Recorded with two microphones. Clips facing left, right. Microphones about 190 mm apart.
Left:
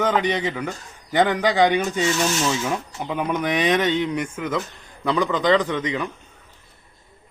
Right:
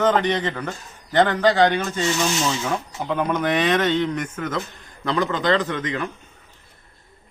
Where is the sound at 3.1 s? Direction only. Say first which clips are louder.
Right 2 dB; 15° left (ahead or behind).